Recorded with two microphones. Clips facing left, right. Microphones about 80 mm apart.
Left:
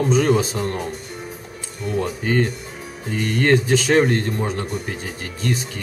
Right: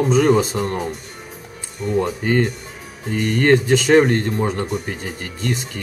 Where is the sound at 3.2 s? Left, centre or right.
Right.